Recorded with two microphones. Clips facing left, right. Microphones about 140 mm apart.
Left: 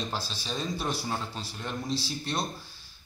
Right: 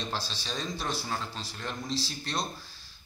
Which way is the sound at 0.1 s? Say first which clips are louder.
Left 1 dB; 10° left (ahead or behind).